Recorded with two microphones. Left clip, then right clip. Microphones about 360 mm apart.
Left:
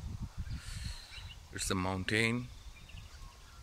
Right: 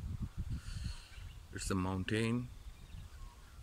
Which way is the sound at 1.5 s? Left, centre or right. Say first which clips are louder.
Left 4 dB; centre.